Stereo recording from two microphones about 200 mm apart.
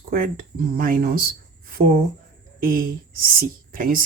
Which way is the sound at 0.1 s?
45° right (ahead or behind).